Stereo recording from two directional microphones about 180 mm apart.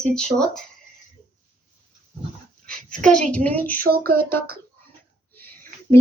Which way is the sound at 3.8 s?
55° right (ahead or behind).